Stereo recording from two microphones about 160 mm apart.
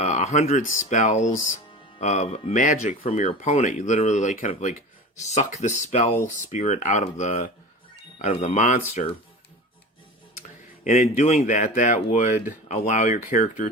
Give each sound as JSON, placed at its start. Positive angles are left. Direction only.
{"t": 0.0, "sound": "speech", "side_deg": 45}
{"t": 10.8, "sound": "speech", "side_deg": 45}